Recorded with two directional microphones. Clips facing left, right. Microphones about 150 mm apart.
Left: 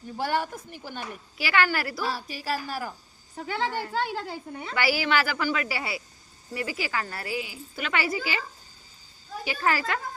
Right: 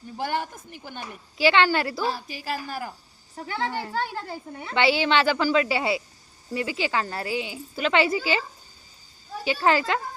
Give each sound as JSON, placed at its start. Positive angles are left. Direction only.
{"t": 1.4, "sound": "a woman's voice", "side_deg": -25}
{"t": 2.6, "sound": "a woman's voice", "side_deg": -50}
{"t": 4.7, "sound": "a woman's voice", "side_deg": -25}